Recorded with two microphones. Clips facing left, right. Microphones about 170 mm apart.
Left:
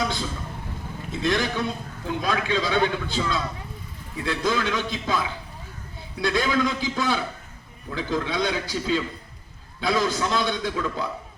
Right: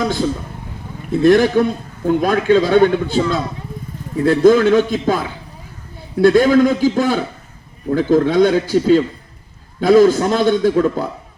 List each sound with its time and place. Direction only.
0.0 s a man's voice: 50° right (ahead or behind)